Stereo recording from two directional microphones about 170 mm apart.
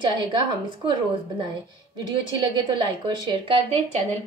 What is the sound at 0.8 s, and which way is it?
A woman's voice, 25° right (ahead or behind).